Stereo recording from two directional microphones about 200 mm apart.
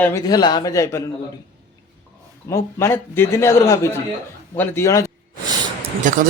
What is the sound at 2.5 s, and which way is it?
A man's voice, 15° left (ahead or behind).